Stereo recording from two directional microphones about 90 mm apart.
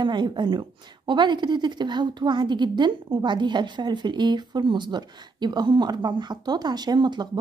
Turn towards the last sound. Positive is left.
turn(degrees=-55)  # may be behind; listen again after turning